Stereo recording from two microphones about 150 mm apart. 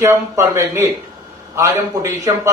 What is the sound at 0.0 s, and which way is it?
A man's voice, 20° right (ahead or behind).